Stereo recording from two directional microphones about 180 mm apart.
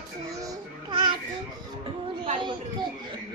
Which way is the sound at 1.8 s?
30° right (ahead or behind).